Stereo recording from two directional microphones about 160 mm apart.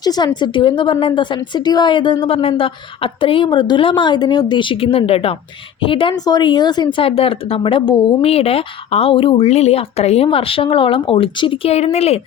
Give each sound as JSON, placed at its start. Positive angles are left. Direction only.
{"t": 0.0, "sound": "a woman's voice", "side_deg": 25}